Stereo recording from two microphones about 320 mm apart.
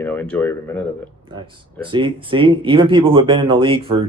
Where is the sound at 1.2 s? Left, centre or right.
Centre.